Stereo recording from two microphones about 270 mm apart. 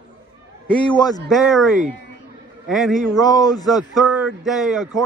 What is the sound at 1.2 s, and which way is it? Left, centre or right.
Speech, centre.